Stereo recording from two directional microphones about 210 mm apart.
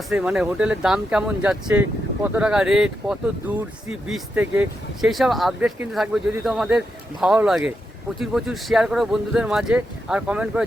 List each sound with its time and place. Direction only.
0.1 s speech: 5° right (ahead or behind)